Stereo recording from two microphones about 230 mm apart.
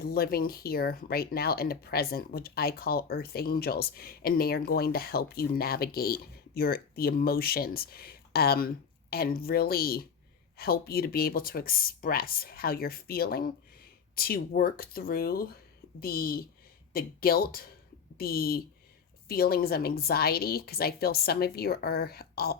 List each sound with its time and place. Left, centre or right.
0.0 s speech: left